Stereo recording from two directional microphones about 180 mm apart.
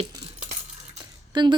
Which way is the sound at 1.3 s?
25° right (ahead or behind).